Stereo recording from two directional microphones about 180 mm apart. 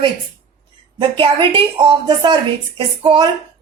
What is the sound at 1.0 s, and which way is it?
Speech, 30° right (ahead or behind).